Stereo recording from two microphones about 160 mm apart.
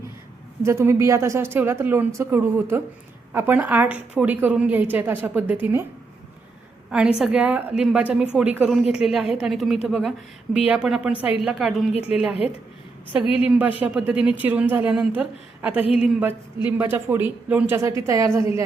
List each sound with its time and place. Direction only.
0.6 s speech: 15° right (ahead or behind)
7.2 s speech: 5° right (ahead or behind)
11.9 s a woman's voice: 40° left (ahead or behind)
13.3 s speech: 10° right (ahead or behind)